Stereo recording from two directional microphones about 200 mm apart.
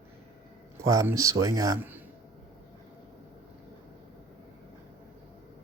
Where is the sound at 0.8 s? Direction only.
15° right (ahead or behind).